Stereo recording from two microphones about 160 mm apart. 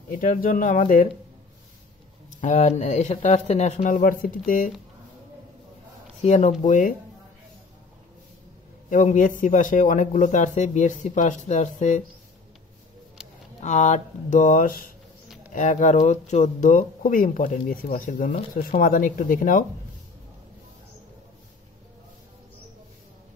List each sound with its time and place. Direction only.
0.1 s speech: 60° left (ahead or behind)
2.4 s speech: 45° left (ahead or behind)
6.2 s speech: 45° left (ahead or behind)
8.9 s speech: 55° left (ahead or behind)
13.6 s speech: 50° left (ahead or behind)